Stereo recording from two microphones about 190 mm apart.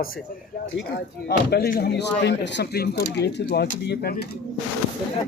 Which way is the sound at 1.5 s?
55° left (ahead or behind).